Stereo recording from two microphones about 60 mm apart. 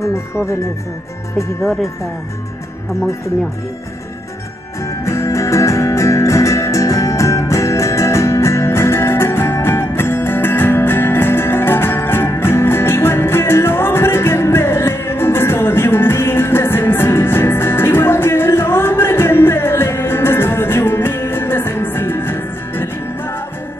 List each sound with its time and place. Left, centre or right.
1.6 s speech: centre
4.8 s music: left